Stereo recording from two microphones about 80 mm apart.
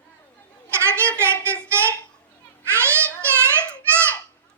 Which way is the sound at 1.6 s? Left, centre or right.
Right.